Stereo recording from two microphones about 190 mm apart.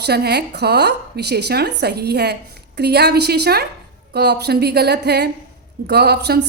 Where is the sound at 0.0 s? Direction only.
60° right (ahead or behind).